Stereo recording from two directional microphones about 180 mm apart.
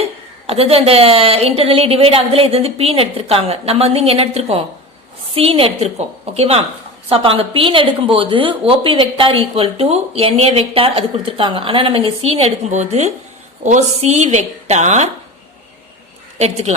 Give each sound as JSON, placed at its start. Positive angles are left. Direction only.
{"t": 0.4, "sound": "a woman's voice", "side_deg": -35}
{"t": 16.4, "sound": "a woman's voice", "side_deg": -35}